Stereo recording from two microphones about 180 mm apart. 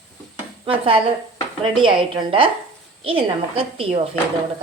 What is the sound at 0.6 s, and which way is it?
A woman's voice, 30° right (ahead or behind).